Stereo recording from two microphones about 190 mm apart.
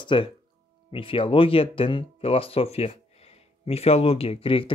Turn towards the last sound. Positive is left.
turn(degrees=30)  # may be behind; listen again after turning